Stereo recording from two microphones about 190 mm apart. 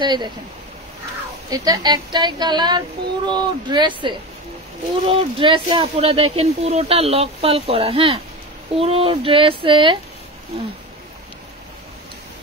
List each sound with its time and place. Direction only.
0.0 s a woman's voice: 25° right (ahead or behind)
1.5 s a woman's voice: 20° right (ahead or behind)